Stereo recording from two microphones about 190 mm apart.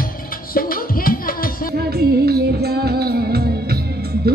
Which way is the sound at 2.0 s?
55° right (ahead or behind).